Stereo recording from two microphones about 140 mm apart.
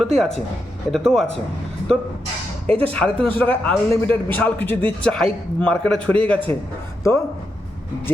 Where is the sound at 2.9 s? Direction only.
10° left (ahead or behind).